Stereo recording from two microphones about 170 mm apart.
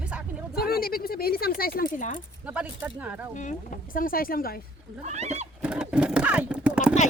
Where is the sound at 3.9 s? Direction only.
55° left (ahead or behind).